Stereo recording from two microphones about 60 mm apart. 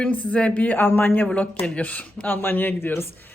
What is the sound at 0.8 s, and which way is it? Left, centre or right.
Speech, left.